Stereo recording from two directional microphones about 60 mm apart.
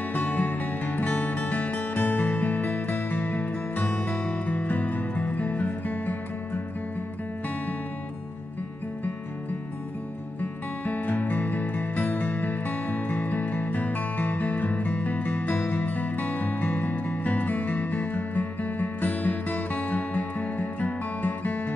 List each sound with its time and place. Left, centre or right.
0.1 s music: left
10.4 s music: left